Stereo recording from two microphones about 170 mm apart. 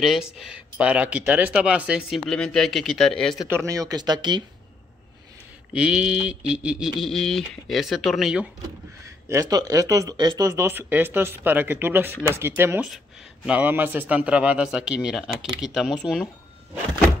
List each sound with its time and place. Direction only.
0.0 s speech: 5° right (ahead or behind)
3.4 s speech: 15° right (ahead or behind)
5.7 s speech: 5° right (ahead or behind)
9.0 s speech: 15° right (ahead or behind); by 16.3 s 5° left (ahead or behind)